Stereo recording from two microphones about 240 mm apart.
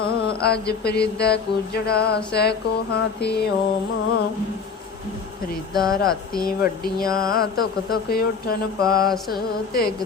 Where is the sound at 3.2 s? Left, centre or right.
Left.